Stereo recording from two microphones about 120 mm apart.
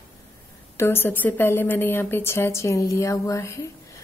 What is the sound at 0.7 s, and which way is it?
A woman's voice, 20° left (ahead or behind).